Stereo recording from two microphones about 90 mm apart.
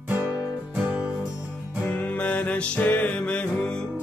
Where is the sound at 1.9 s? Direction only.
15° left (ahead or behind).